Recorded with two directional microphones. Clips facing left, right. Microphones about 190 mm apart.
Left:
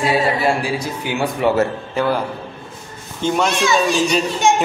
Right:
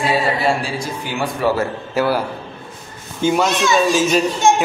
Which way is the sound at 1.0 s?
20° left (ahead or behind).